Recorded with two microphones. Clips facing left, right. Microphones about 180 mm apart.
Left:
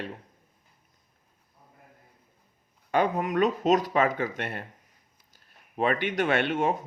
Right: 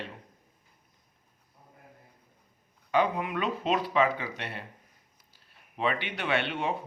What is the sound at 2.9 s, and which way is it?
Speech, 45° left (ahead or behind).